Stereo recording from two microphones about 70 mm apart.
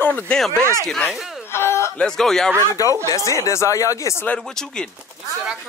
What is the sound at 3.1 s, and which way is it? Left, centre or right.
Speech, left.